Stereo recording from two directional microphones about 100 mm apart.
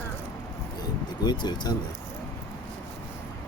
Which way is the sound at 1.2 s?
45° left (ahead or behind).